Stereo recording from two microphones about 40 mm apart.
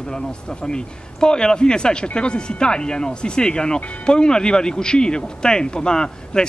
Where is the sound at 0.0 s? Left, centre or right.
Left.